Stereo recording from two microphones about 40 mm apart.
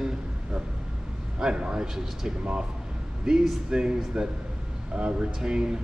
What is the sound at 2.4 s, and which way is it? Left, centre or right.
Speech, right.